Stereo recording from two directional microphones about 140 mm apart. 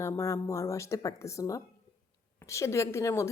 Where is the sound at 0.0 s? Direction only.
20° left (ahead or behind).